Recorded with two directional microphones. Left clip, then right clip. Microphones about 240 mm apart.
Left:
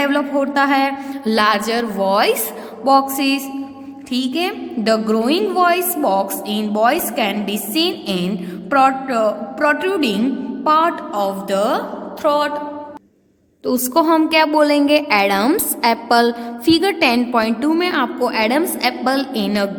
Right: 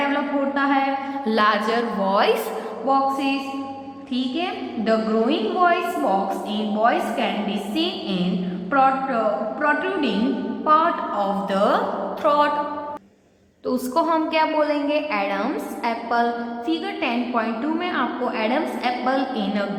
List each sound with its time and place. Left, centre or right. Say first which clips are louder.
0.0 s a woman's voice: left 5 dB; left
12.2 s a sound: left 2 dB; left
13.7 s a woman's voice: left 6 dB; left